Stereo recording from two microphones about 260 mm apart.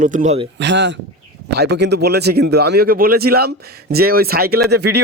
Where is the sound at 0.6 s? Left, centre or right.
Right.